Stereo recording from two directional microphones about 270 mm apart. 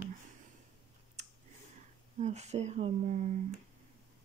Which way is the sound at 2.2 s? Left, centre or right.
Right.